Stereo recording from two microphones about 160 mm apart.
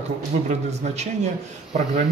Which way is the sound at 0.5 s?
45° right (ahead or behind).